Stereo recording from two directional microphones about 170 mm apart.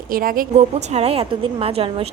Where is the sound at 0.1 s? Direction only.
55° right (ahead or behind).